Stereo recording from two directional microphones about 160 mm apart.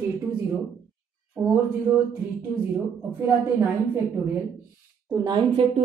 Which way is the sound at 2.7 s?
15° right (ahead or behind).